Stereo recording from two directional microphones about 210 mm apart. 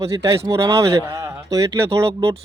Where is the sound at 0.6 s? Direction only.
25° right (ahead or behind).